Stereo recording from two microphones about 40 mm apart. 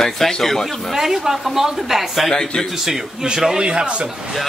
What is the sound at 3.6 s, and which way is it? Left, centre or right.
Speech, right.